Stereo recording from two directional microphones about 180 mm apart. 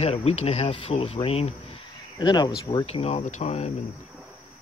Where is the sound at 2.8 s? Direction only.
35° left (ahead or behind).